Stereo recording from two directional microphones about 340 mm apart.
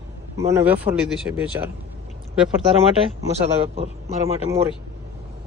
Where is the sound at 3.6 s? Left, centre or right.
Centre.